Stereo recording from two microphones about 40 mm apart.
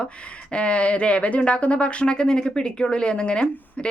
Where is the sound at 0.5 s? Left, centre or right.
Left.